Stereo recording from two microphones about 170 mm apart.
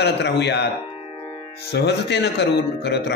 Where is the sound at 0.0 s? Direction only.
85° left.